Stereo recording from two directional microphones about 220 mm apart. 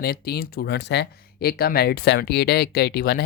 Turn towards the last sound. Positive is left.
turn(degrees=45)  # may be behind; listen again after turning